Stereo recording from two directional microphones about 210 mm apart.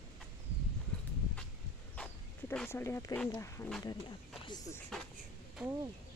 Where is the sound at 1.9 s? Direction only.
5° left (ahead or behind).